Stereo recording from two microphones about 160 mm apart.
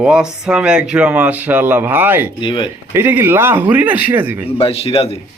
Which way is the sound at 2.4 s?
30° left (ahead or behind).